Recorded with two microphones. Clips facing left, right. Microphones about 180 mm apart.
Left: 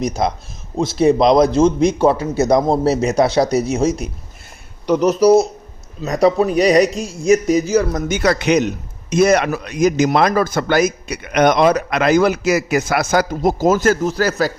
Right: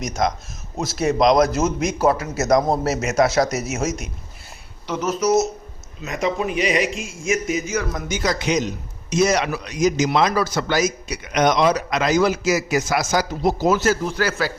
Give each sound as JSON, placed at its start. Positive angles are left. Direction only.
{"t": 0.0, "sound": "a man's voice", "side_deg": 30}
{"t": 8.0, "sound": "a man's voice", "side_deg": 60}